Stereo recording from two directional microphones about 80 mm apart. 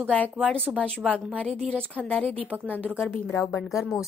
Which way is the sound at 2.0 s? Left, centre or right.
Centre.